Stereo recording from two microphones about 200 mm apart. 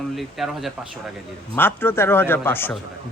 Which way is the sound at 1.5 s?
10° left (ahead or behind).